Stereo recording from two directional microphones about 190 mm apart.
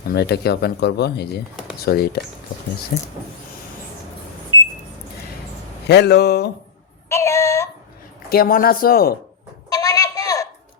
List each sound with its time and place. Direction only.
0.1 s speech: 60° left (ahead or behind)
5.9 s speech: 60° left (ahead or behind)
7.1 s female singing: 15° left (ahead or behind)
8.3 s speech: 50° left (ahead or behind)
9.6 s a sound: 20° left (ahead or behind)